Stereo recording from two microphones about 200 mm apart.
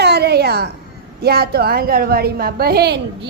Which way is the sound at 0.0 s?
55° right (ahead or behind).